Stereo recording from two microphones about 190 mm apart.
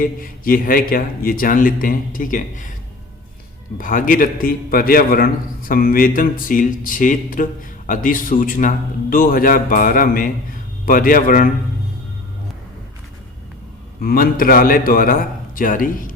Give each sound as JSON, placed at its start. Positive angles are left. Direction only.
{"t": 0.0, "sound": "a man's voice", "side_deg": 50}
{"t": 3.8, "sound": "a man's voice", "side_deg": 45}
{"t": 14.0, "sound": "a man's voice", "side_deg": 50}